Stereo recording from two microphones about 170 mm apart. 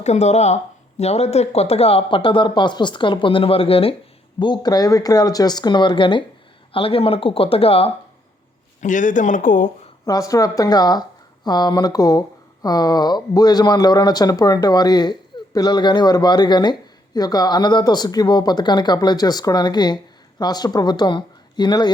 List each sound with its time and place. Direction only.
0.0 s speech: 40° left (ahead or behind)
8.8 s speech: 50° left (ahead or behind)
10.1 s speech: 20° left (ahead or behind)